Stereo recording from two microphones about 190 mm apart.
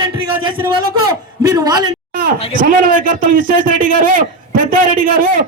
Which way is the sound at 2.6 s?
45° right (ahead or behind).